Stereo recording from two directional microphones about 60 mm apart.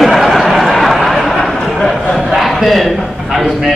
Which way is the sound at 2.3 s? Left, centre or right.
Centre.